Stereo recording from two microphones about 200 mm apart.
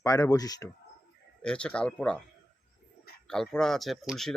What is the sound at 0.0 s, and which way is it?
Speech, 15° left (ahead or behind).